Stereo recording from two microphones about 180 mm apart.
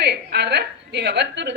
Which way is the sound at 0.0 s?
65° right (ahead or behind).